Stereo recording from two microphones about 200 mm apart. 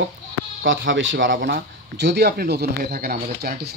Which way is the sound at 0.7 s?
65° right (ahead or behind).